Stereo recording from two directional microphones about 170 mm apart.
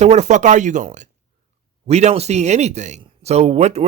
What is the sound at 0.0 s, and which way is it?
A man's voice, 40° right (ahead or behind).